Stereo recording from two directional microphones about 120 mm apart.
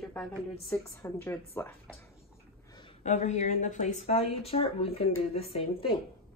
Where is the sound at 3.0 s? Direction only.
70° left (ahead or behind); by 6.0 s 50° left (ahead or behind).